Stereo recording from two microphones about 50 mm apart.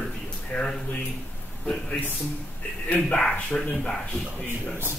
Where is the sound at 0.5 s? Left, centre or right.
Left.